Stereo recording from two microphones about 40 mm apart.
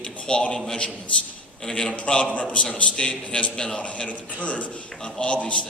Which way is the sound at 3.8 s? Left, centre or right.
Left.